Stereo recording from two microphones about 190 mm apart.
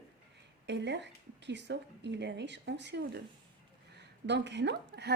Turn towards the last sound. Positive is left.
turn(degrees=-60)  # may be behind; listen again after turning